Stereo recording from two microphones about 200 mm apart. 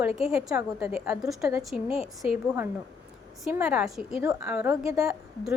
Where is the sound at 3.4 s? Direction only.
5° right (ahead or behind).